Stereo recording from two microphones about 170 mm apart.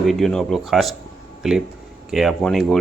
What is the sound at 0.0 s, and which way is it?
Speech, centre (ahead or behind).